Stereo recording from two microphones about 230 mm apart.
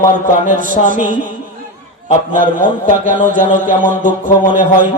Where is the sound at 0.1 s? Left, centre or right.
Right.